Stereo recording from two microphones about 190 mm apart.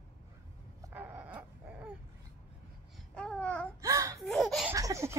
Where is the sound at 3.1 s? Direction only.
5° left (ahead or behind).